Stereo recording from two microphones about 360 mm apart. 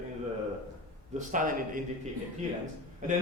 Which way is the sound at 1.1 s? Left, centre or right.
Right.